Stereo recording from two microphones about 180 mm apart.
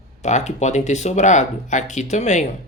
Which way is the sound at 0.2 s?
40° left (ahead or behind).